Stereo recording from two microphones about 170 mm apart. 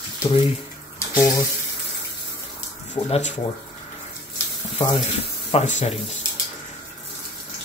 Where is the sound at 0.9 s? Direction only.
15° left (ahead or behind).